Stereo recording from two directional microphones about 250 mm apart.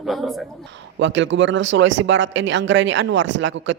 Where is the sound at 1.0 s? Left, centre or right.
Right.